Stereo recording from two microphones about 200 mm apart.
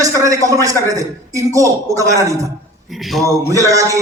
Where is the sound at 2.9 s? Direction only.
Centre (ahead or behind).